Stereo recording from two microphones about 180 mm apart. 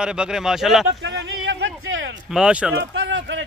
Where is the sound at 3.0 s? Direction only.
90° right.